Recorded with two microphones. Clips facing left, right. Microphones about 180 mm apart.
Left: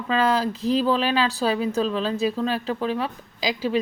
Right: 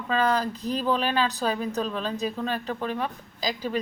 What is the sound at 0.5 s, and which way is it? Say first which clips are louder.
Speech: left 7 dB; 90° left.